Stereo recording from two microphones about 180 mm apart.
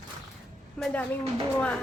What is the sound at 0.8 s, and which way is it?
Speech, 5° left (ahead or behind).